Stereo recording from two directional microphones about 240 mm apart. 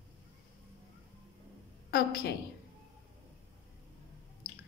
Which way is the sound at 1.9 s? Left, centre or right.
Left.